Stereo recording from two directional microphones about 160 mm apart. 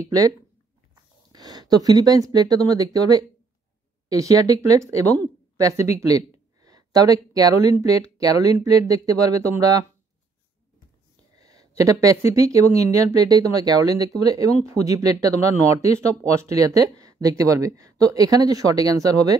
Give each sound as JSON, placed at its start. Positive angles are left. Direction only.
{"t": 0.0, "sound": "speech", "side_deg": -20}
{"t": 1.3, "sound": "speech", "side_deg": -25}
{"t": 11.3, "sound": "speech", "side_deg": -25}